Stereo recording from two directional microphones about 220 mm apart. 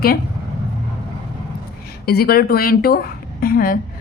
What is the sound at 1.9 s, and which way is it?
A woman's voice, 45° left (ahead or behind).